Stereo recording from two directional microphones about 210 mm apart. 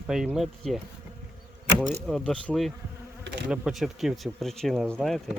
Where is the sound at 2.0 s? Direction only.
Centre (ahead or behind).